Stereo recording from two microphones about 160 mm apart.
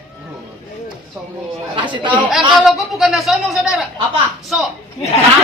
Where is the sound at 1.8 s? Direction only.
30° right (ahead or behind).